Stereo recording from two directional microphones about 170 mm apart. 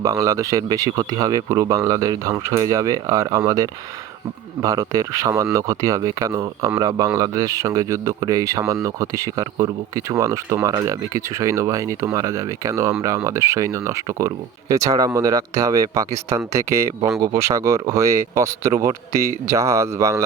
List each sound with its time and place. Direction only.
0.0 s speech: 20° right (ahead or behind)